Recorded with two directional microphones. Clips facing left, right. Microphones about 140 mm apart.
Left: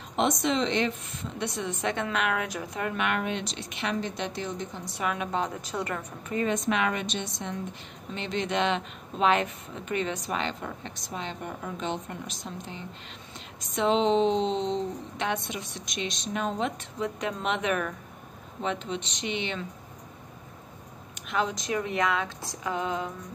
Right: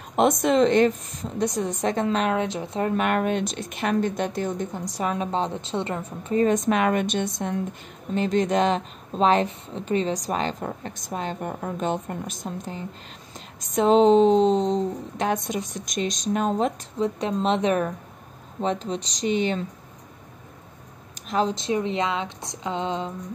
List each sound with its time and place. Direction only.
0.1 s a woman's voice: 50° right (ahead or behind); by 6.4 s 30° right (ahead or behind)
6.4 s a woman's voice: 45° right (ahead or behind)
21.1 s speech: 35° right (ahead or behind)